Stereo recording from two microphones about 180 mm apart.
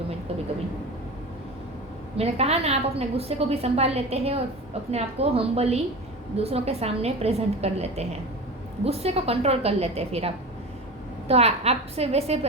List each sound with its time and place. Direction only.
2.1 s a woman's voice: 35° right (ahead or behind)